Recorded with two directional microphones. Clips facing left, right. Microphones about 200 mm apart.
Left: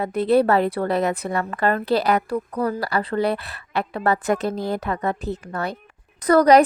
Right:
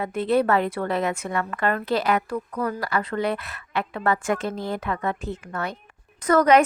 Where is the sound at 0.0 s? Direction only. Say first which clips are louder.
Left 4 dB; 40° left (ahead or behind).